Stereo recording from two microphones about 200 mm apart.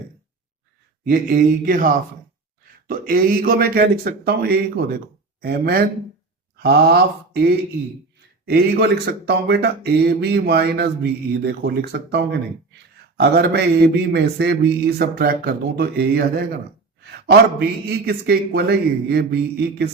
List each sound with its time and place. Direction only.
1.0 s a man's voice: 45° right (ahead or behind)
8.4 s a man's voice: 55° right (ahead or behind)